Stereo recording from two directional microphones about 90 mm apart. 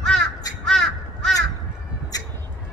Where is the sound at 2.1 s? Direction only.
45° left (ahead or behind).